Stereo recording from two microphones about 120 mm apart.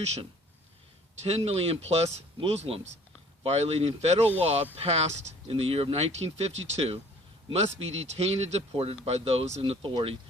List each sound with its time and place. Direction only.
0.0 s speech: 65° right (ahead or behind)
1.5 s speech: 55° right (ahead or behind)